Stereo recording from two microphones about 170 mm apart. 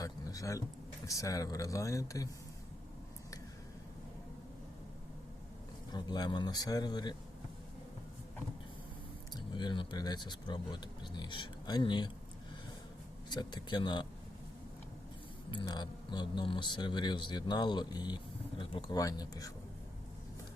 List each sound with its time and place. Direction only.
0.0 s a sound: 20° left (ahead or behind)
1.0 s speech: 20° left (ahead or behind)
5.9 s speech: 25° left (ahead or behind)
9.3 s speech: 25° left (ahead or behind)
13.3 s speech: 25° left (ahead or behind)
15.4 s speech: 25° left (ahead or behind)